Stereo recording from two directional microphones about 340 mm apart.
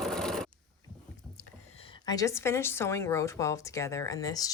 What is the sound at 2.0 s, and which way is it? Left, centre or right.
Speech, centre.